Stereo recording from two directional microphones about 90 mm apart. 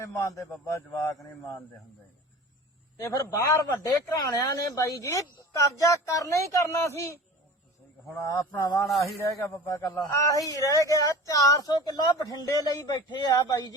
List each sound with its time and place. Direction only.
0.0 s a woman's voice: 35° left (ahead or behind)
3.1 s a woman's voice: 40° left (ahead or behind)
8.0 s a woman's voice: 35° left (ahead or behind)
8.6 s speech: 45° left (ahead or behind)
8.9 s a man's voice: centre (ahead or behind)
9.2 s a woman's voice: 40° left (ahead or behind)